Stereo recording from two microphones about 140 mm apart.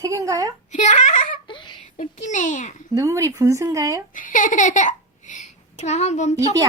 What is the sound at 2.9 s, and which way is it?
Speech, 25° right (ahead or behind).